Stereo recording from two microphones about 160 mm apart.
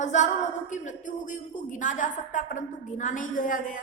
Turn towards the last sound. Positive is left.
turn(degrees=55)  # may be behind; listen again after turning